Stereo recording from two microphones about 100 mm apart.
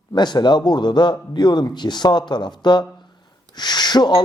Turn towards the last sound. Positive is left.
turn(degrees=45)  # may be behind; listen again after turning